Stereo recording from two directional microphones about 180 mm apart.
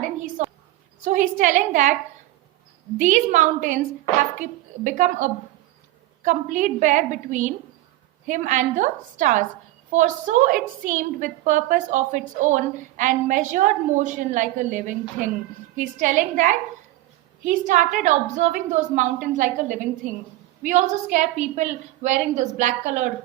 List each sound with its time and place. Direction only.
0.4 s a sound: 40° right (ahead or behind)
1.0 s a woman's voice: 45° right (ahead or behind)
3.0 s a woman's voice: 45° right (ahead or behind)